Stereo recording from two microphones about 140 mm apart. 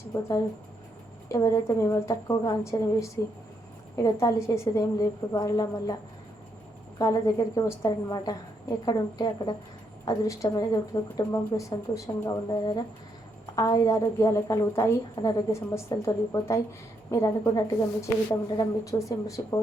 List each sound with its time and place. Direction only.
0.1 s speech: 25° left (ahead or behind)
7.0 s speech: 25° left (ahead or behind)
13.6 s a woman's voice: 25° left (ahead or behind)
15.1 s speech: 30° left (ahead or behind)